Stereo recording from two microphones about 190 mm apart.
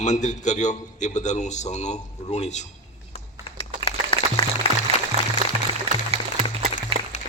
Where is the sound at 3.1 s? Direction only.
30° left (ahead or behind).